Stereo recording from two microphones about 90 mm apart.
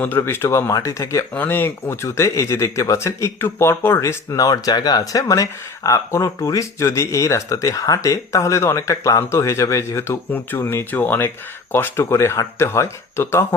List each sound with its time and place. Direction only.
0.0 s speech: 25° left (ahead or behind)
1.3 s speech: 20° left (ahead or behind)